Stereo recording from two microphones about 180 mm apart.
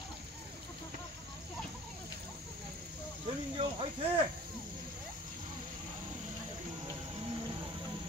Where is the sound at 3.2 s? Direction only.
30° right (ahead or behind).